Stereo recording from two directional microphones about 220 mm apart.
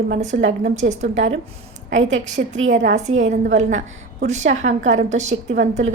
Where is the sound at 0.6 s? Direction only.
30° right (ahead or behind).